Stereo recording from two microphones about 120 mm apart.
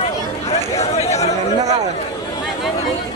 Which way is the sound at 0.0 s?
60° left (ahead or behind).